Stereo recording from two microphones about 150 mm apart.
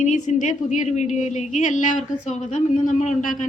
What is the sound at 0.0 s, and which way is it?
A woman's voice, 55° left (ahead or behind).